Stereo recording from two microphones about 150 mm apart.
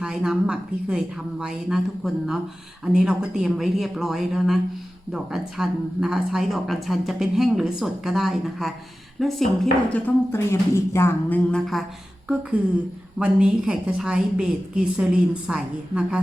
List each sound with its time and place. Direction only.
0.0 s a woman's voice: 5° right (ahead or behind)
9.9 s a woman's voice: 20° left (ahead or behind)
11.5 s a woman's voice: centre (ahead or behind)
13.1 s a woman's voice: 5° right (ahead or behind)